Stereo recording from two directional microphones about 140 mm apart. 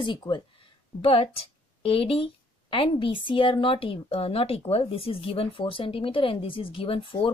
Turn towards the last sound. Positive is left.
turn(degrees=40)  # may be behind; listen again after turning